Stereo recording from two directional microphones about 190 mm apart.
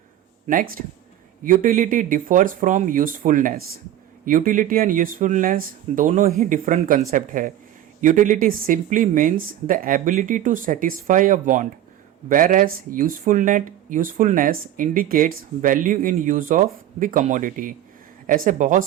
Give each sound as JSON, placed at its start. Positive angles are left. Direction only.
{"t": 0.4, "sound": "speech", "side_deg": -45}